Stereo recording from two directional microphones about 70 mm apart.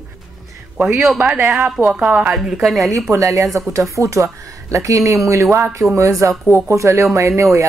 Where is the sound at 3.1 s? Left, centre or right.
Right.